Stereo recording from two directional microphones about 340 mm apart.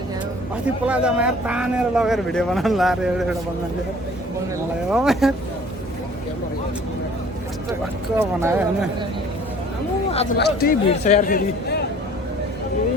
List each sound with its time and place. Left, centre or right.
0.9 s speech: centre
4.9 s speech: centre
8.2 s speech: centre
10.1 s speech: centre
10.3 s a man's voice: left